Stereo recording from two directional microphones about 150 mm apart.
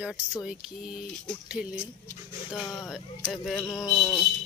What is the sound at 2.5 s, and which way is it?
Speech, 5° left (ahead or behind).